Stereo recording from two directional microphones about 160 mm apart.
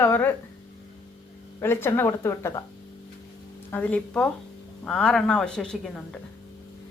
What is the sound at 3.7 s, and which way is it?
A woman's voice, 10° left (ahead or behind).